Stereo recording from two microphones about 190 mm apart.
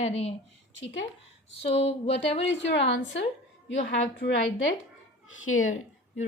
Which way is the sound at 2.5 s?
70° left (ahead or behind).